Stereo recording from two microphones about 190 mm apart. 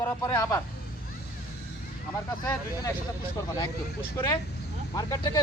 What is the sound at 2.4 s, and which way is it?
Speech, 20° left (ahead or behind).